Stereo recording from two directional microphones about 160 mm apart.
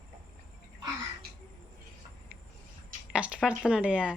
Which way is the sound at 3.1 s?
5° right (ahead or behind).